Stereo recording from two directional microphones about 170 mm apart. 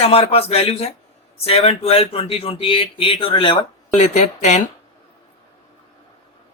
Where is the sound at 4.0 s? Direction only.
40° left (ahead or behind).